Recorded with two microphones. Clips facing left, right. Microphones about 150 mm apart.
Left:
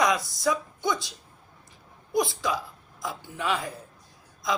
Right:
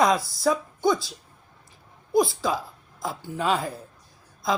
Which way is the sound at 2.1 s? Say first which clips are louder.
Right 4 dB; 30° right (ahead or behind).